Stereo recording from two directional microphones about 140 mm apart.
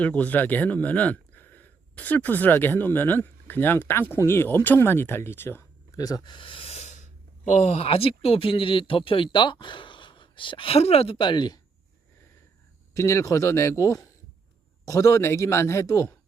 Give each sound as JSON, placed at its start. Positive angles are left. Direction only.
{"t": 0.0, "sound": "speech", "side_deg": 10}
{"t": 12.9, "sound": "a man's voice", "side_deg": 20}